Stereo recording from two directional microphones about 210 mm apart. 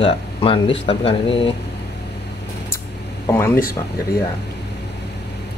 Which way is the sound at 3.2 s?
10° left (ahead or behind).